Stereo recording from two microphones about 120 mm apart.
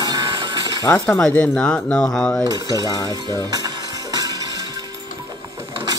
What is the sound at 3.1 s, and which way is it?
Music, 35° right (ahead or behind).